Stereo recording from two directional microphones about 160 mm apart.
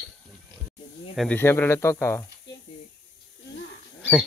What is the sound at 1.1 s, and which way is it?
Speech, 10° left (ahead or behind).